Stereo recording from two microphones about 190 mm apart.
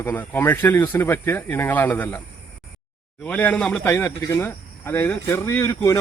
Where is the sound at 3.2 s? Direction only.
5° left (ahead or behind).